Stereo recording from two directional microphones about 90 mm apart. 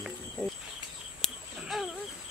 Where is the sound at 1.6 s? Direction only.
5° right (ahead or behind).